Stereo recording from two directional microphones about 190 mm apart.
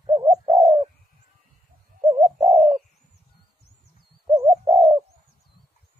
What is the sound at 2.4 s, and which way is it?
Bird, 35° right (ahead or behind).